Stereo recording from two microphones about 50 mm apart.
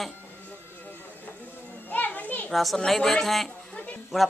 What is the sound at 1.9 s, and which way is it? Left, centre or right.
Children playing, left.